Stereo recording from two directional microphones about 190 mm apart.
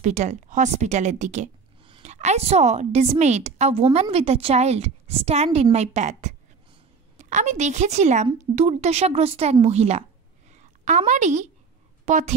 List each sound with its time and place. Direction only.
0.0 s a woman's voice: 40° right (ahead or behind)
10.5 s a sound: 40° right (ahead or behind)
12.1 s speech: 35° right (ahead or behind)